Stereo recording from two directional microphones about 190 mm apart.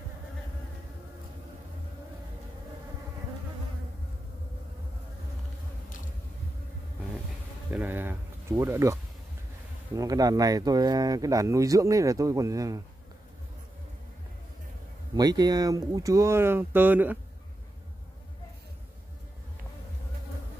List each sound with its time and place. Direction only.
7.7 s speech: 10° right (ahead or behind)
9.9 s speech: 20° right (ahead or behind)
15.1 s speech: 20° right (ahead or behind)